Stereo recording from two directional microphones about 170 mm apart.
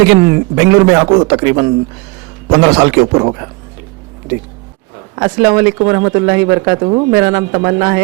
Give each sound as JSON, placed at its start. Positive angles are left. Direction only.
{"t": 0.0, "sound": "a man's voice", "side_deg": -20}
{"t": 5.1, "sound": "speech", "side_deg": -20}
{"t": 6.7, "sound": "speech", "side_deg": -30}
{"t": 7.1, "sound": "speech", "side_deg": -15}